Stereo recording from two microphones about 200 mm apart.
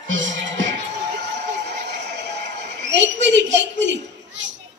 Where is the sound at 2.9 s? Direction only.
60° right (ahead or behind).